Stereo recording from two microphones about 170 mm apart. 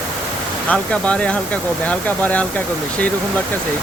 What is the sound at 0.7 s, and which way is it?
Speech, 5° left (ahead or behind).